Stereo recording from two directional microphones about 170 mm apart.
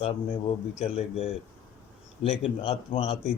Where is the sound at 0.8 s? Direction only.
35° left (ahead or behind).